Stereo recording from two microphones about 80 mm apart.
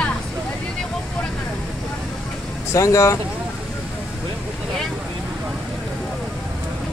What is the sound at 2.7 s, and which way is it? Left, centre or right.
Speech, left.